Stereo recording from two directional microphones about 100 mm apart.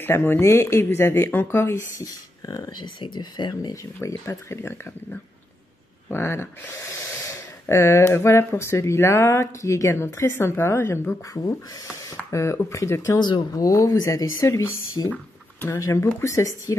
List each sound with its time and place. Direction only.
0.0 s speech: 20° left (ahead or behind)
2.0 s speech: 40° left (ahead or behind)
4.0 s speech: 30° left (ahead or behind)
11.4 s speech: 40° left (ahead or behind)
13.2 s speech: 40° left (ahead or behind)